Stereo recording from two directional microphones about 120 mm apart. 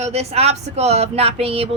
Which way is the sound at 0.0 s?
60° right (ahead or behind).